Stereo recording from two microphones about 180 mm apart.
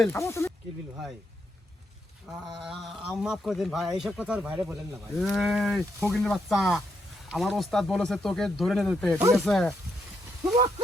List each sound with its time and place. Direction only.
0.1 s speech: 15° left (ahead or behind)
2.2 s a sound: 5° right (ahead or behind)
2.6 s speech: centre (ahead or behind)